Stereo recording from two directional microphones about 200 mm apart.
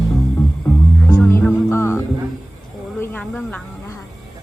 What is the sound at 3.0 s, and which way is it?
Snake, 10° left (ahead or behind).